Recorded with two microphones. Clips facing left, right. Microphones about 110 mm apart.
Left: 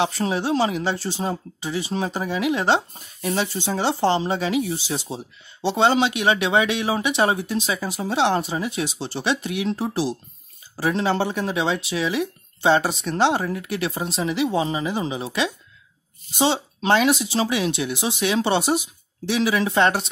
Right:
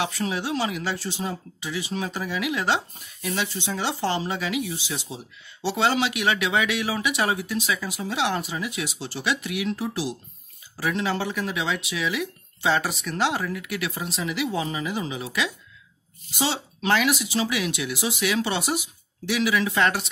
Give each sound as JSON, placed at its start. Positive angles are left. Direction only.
{"t": 0.0, "sound": "speech", "side_deg": 30}
{"t": 5.6, "sound": "speech", "side_deg": 25}